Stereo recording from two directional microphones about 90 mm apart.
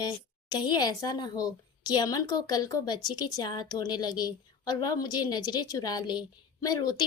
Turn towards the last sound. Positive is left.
turn(degrees=45)  # may be behind; listen again after turning